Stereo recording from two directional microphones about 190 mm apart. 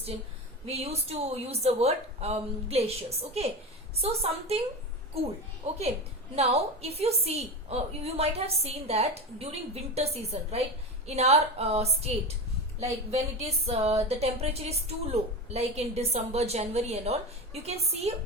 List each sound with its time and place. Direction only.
0.6 s speech: 35° right (ahead or behind)
5.6 s speech: 35° right (ahead or behind)